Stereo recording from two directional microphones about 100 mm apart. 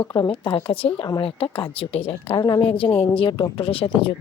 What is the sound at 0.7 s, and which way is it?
A woman's voice, 70° left (ahead or behind).